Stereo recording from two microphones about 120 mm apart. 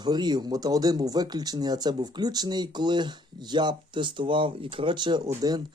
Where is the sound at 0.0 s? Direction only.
35° right (ahead or behind).